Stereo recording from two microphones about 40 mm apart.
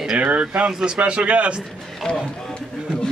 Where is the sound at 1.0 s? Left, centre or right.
Right.